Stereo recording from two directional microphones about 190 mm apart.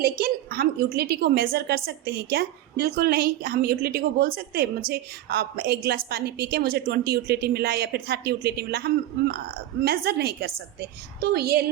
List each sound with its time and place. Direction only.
0.0 s a woman's voice: 55° right (ahead or behind)